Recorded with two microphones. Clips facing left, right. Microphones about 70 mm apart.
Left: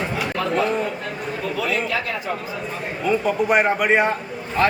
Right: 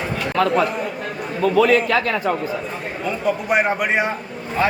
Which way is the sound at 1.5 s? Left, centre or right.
Right.